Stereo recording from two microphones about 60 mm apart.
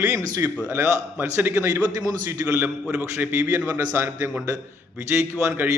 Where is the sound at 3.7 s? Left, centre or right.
Right.